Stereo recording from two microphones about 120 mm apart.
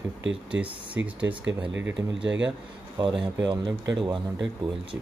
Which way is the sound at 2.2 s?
10° right (ahead or behind).